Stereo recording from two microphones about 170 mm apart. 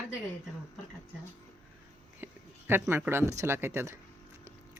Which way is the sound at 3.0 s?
15° right (ahead or behind).